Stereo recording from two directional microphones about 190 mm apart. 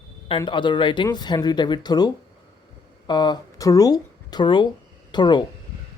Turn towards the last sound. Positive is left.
turn(degrees=25)  # may be behind; listen again after turning